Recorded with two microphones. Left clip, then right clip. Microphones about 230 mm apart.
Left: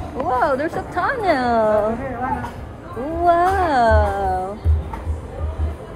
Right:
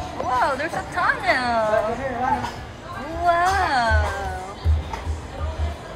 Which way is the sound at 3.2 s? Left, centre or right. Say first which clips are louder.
Left 3 dB; centre.